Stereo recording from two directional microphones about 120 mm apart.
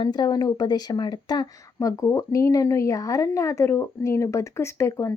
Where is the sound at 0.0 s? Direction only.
35° left (ahead or behind).